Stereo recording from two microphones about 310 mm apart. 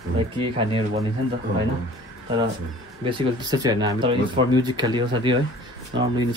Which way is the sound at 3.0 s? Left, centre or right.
Centre.